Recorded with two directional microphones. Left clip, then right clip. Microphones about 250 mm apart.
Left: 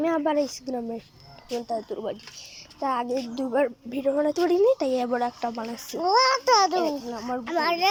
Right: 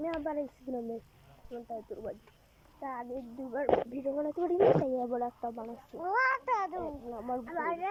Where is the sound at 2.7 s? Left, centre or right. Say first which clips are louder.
Left 13 dB; centre.